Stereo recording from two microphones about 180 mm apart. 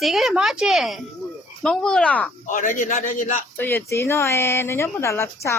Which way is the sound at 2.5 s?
45° left (ahead or behind).